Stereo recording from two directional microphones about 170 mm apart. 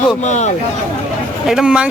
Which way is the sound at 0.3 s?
45° left (ahead or behind).